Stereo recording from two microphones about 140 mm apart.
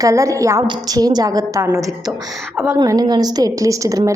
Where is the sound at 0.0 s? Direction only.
20° right (ahead or behind).